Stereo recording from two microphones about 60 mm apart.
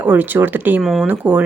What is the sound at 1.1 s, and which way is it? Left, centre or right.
Speech, centre.